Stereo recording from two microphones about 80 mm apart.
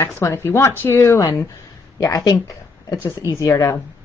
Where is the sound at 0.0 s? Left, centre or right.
Left.